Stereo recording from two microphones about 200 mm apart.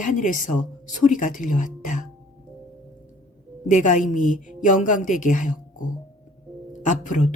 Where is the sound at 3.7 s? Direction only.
40° left (ahead or behind).